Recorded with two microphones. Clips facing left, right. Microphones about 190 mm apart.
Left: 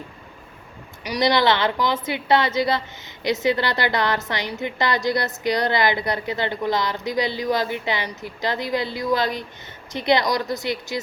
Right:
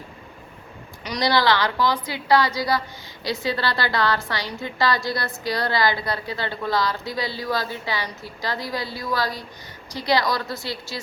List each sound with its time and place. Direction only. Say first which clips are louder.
1.0 s a woman's voice: left 2 dB; 15° left (ahead or behind)